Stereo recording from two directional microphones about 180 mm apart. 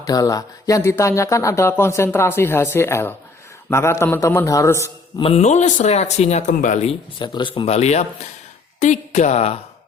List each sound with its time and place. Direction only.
0.0 s speech: 20° left (ahead or behind)
5.2 s speech: 35° left (ahead or behind)
7.2 s speech: 25° left (ahead or behind)